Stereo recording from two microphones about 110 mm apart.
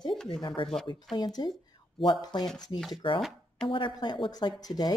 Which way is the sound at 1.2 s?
40° left (ahead or behind).